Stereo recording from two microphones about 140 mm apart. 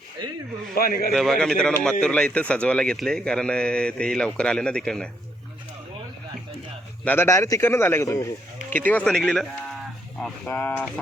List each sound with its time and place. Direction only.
0.8 s a man's voice: 90° left
1.1 s speech: centre (ahead or behind)
7.0 s a man's voice: 15° left (ahead or behind)